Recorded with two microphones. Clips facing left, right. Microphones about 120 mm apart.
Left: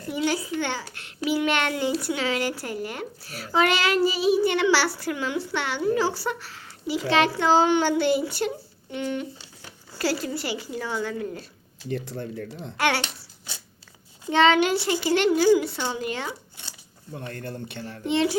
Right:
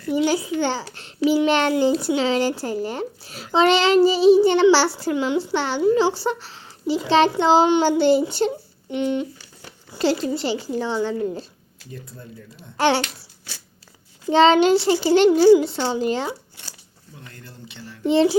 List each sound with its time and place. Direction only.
0.1 s a child's voice: 30° right (ahead or behind)
11.9 s speech: 80° left
12.7 s a child's voice: 30° right (ahead or behind)
14.3 s a child's voice: 30° right (ahead or behind)
17.1 s speech: 60° left (ahead or behind)
18.0 s a child's voice: 35° right (ahead or behind)